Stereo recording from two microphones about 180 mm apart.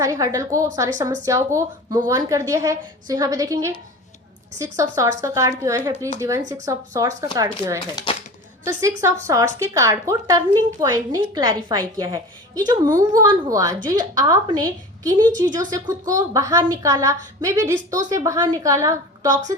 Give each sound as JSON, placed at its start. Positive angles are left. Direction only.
{"t": 0.0, "sound": "a woman's voice", "side_deg": -15}
{"t": 8.1, "sound": "a sound", "side_deg": 30}
{"t": 8.6, "sound": "a woman's voice", "side_deg": -15}